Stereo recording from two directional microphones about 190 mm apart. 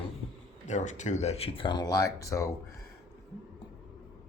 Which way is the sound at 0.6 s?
40° left (ahead or behind).